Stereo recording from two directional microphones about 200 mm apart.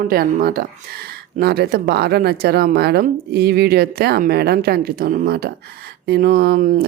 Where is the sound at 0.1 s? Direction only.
45° right (ahead or behind).